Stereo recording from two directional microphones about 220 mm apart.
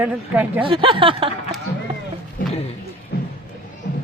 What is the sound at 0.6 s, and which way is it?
Speech, 25° right (ahead or behind).